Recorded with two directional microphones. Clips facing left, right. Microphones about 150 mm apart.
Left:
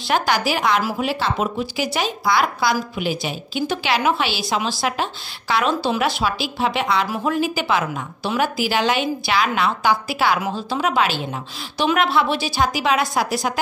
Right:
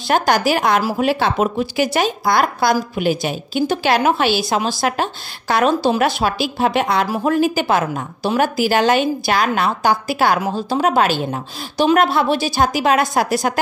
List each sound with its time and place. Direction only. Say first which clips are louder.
0.1 s speech: right 4 dB; 50° right (ahead or behind)